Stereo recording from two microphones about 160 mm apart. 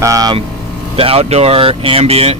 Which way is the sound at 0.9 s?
35° right (ahead or behind).